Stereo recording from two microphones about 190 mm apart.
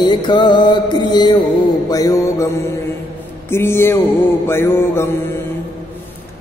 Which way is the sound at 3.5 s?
15° left (ahead or behind).